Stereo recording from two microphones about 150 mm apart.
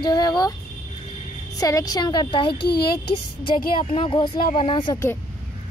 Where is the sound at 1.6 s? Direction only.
25° left (ahead or behind).